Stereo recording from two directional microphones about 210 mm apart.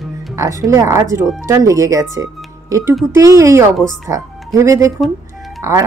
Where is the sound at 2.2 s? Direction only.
15° right (ahead or behind).